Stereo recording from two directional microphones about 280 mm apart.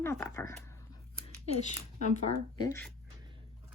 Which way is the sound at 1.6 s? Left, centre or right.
Left.